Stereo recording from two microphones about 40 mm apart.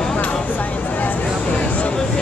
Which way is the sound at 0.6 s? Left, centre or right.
Left.